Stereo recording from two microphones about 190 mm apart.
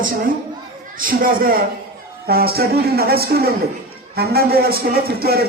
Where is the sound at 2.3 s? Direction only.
55° right (ahead or behind).